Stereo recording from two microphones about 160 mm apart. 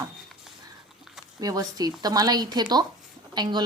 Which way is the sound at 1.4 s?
25° right (ahead or behind).